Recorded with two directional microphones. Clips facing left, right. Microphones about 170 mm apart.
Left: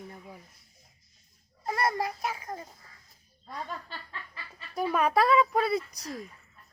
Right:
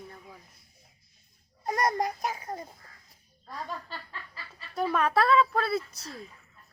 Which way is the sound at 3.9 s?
35° right (ahead or behind).